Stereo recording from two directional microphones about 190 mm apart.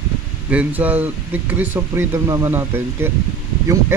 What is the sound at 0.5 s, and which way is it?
Speech, 10° right (ahead or behind).